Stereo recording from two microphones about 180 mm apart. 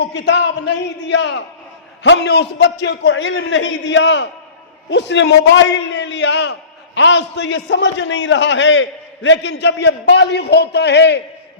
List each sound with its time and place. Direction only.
0.0 s a man's voice: 75° left (ahead or behind); by 4.3 s 90° left
4.9 s a man's voice: 75° left (ahead or behind)
6.9 s a man's voice: 80° left